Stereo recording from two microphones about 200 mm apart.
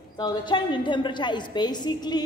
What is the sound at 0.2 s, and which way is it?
A woman's voice, 25° left (ahead or behind).